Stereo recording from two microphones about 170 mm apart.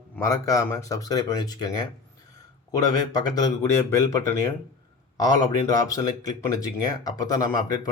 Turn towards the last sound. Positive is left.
turn(degrees=20)  # may be behind; listen again after turning